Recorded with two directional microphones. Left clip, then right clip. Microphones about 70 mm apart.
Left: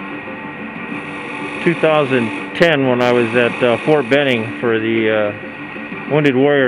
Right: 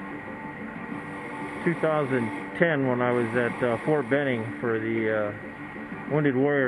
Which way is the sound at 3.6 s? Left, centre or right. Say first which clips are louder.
Left 11 dB; left.